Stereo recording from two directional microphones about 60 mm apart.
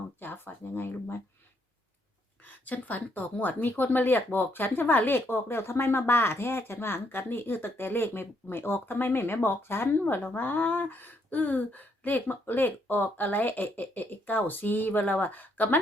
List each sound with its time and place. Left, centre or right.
0.2 s speech: left
2.6 s speech: left